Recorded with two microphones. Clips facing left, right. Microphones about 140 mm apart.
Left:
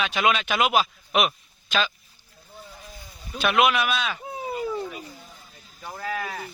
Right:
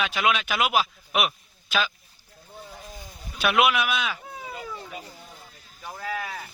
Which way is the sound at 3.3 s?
10° right (ahead or behind).